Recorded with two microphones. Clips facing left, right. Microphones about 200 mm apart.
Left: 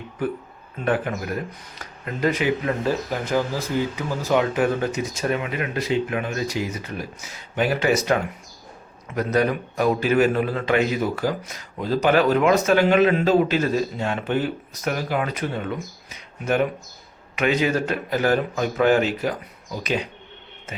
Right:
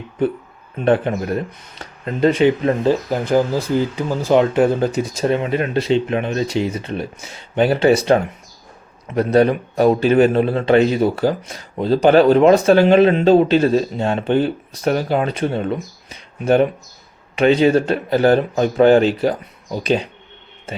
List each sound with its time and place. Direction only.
0.2 s a man's voice: 30° right (ahead or behind)